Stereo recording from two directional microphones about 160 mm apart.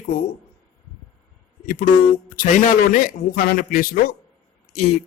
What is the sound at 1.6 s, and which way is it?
A man's voice, 55° left (ahead or behind).